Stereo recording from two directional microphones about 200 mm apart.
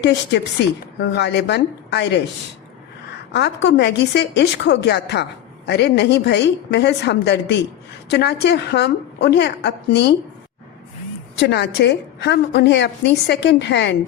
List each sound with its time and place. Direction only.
0.0 s a woman's voice: 60° left (ahead or behind)
3.3 s a woman's voice: 60° left (ahead or behind)
11.3 s a woman's voice: 55° left (ahead or behind)